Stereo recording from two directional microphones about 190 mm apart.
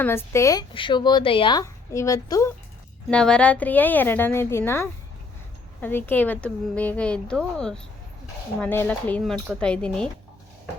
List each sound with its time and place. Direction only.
0.0 s speech: 10° left (ahead or behind)
0.7 s a woman's voice: 25° left (ahead or behind)
3.1 s speech: 5° left (ahead or behind)